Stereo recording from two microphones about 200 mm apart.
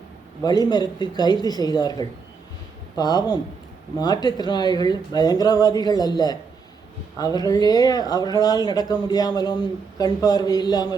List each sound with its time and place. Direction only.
0.4 s speech: 20° left (ahead or behind)